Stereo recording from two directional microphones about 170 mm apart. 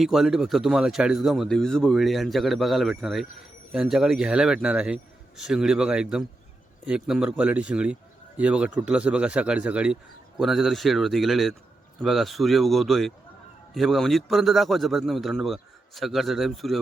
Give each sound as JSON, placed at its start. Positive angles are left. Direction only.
{"t": 0.0, "sound": "speech", "side_deg": 0}